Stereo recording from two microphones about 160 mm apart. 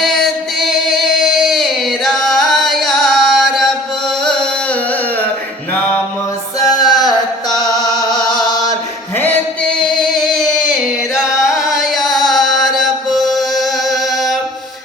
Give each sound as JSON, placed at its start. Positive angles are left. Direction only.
{"t": 0.0, "sound": "music", "side_deg": 0}
{"t": 6.6, "sound": "music", "side_deg": 25}
{"t": 7.7, "sound": "music", "side_deg": -20}
{"t": 8.2, "sound": "chant", "side_deg": 25}
{"t": 9.1, "sound": "singing", "side_deg": 10}